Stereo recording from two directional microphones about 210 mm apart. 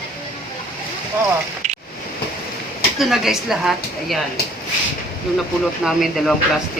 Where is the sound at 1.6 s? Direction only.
35° right (ahead or behind).